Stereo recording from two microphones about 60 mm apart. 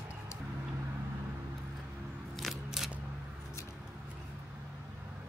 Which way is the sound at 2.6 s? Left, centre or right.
Centre.